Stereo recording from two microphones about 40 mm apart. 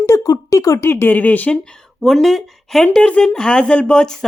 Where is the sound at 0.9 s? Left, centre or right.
Left.